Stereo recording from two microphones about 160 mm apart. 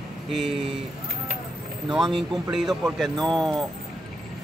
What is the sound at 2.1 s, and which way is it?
Speech, centre (ahead or behind).